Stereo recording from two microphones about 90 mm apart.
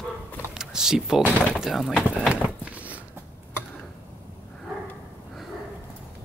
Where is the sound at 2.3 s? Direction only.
15° right (ahead or behind).